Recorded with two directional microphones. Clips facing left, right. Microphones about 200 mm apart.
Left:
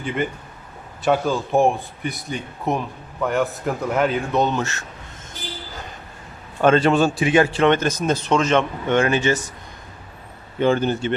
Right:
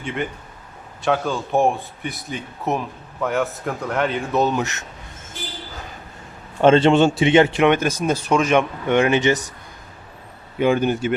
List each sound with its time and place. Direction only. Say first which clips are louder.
0.0 s speech: left 2 dB; centre (ahead or behind)
4.6 s speech: even; 20° right (ahead or behind)
6.6 s a man's voice: right 2 dB; 25° right (ahead or behind)
10.6 s a man's voice: right 1 dB; 10° right (ahead or behind)